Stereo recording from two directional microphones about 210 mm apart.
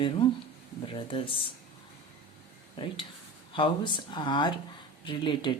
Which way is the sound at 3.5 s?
25° left (ahead or behind).